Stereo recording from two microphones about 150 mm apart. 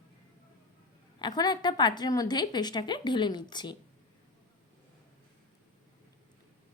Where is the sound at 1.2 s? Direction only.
30° left (ahead or behind).